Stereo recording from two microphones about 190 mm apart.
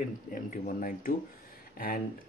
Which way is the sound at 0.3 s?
45° left (ahead or behind).